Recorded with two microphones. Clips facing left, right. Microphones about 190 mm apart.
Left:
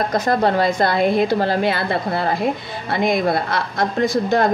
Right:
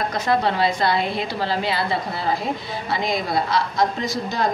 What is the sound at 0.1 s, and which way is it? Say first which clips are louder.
Speech: left 3 dB; 45° left (ahead or behind).